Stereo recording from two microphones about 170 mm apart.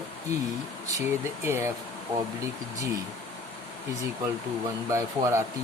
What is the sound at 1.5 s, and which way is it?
Speech, 15° right (ahead or behind).